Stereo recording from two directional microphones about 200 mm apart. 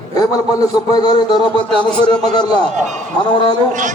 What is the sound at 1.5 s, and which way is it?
Speech, 5° left (ahead or behind).